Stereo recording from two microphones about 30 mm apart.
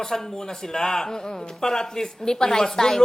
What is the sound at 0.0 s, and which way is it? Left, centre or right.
Speech, centre.